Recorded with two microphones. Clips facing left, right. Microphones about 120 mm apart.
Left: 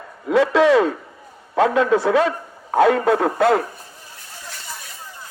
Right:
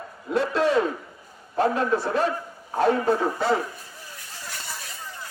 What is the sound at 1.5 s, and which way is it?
Speech, 90° left.